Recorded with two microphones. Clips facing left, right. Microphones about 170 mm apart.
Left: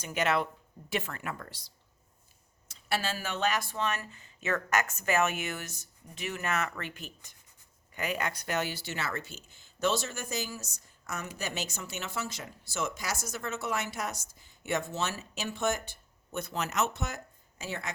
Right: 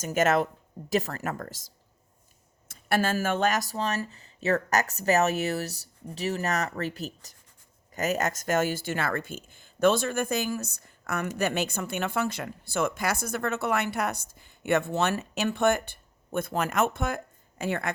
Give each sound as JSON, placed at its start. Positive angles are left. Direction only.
{"t": 0.0, "sound": "speech", "side_deg": -45}